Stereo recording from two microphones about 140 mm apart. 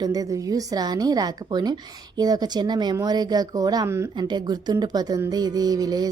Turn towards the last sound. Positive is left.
turn(degrees=-25)  # may be behind; listen again after turning